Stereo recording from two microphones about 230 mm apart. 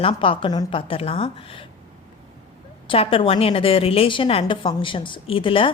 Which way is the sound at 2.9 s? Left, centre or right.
Left.